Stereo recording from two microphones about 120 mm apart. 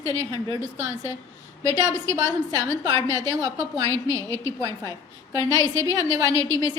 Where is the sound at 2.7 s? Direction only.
30° right (ahead or behind).